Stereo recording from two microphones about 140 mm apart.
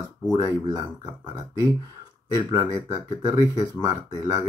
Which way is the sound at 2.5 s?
25° right (ahead or behind).